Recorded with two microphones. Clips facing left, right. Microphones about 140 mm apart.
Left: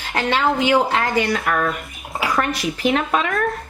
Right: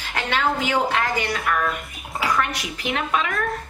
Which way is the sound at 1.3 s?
40° left (ahead or behind).